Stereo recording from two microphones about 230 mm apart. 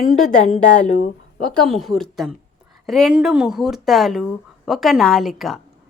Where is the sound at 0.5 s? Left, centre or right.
Left.